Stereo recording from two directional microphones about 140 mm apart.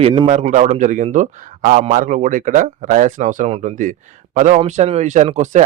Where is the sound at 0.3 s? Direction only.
60° right (ahead or behind).